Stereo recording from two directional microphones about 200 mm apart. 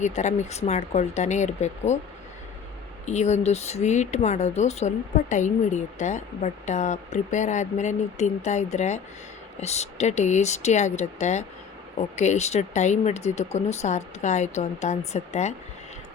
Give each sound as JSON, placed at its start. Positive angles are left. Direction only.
{"t": 0.0, "sound": "speech", "side_deg": 35}
{"t": 3.1, "sound": "speech", "side_deg": 35}